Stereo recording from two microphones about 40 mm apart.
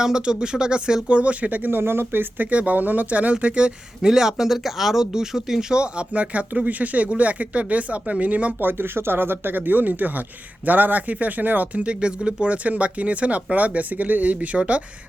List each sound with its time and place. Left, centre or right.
0.0 s speech: centre
1.0 s speech: right
1.7 s speech: right
2.4 s speech: right
3.3 s speech: right
4.0 s speech: centre
5.8 s speech: right
8.6 s speech: right
11.8 s speech: right
12.6 s speech: right
14.5 s speech: centre